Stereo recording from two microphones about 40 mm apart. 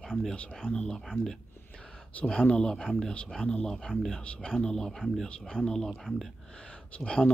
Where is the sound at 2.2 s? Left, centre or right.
Left.